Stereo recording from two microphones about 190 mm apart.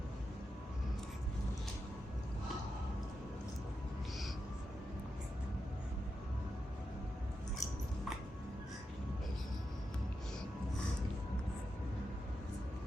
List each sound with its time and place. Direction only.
7.6 s chewing: 20° left (ahead or behind)